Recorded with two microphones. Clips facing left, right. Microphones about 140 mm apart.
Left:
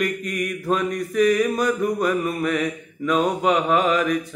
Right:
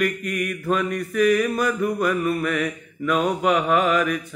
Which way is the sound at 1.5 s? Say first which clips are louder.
Left 1 dB; centre (ahead or behind).